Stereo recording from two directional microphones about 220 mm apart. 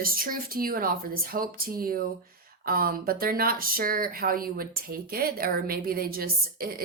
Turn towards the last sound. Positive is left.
turn(degrees=-45)  # may be behind; listen again after turning